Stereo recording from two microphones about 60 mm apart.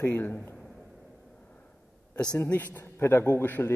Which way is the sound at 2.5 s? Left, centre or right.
Left.